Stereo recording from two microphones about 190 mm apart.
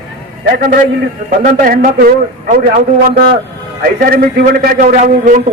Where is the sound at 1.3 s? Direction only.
45° right (ahead or behind).